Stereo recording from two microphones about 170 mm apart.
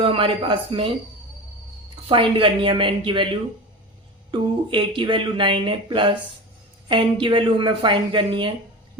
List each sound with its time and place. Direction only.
0.0 s a woman's voice: 30° right (ahead or behind)
2.0 s a woman's voice: 30° right (ahead or behind)
4.3 s speech: 25° right (ahead or behind)